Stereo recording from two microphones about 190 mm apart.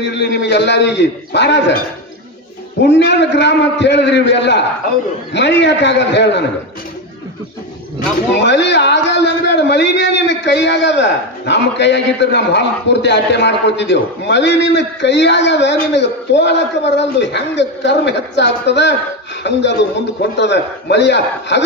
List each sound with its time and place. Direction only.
0.1 s a man's voice: 60° left (ahead or behind)
2.9 s a man's voice: 65° left (ahead or behind)
8.4 s a man's voice: 65° left (ahead or behind)
20.2 s a man's voice: 65° left (ahead or behind)